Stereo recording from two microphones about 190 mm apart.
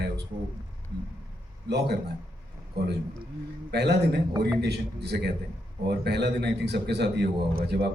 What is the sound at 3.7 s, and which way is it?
A man's voice, 60° right (ahead or behind).